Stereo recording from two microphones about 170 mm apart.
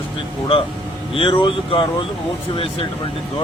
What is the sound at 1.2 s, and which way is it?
Speech, 30° left (ahead or behind).